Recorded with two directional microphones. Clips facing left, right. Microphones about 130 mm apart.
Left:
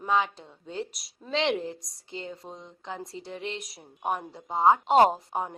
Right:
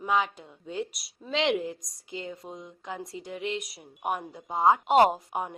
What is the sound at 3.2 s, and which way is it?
Speech, 35° left (ahead or behind).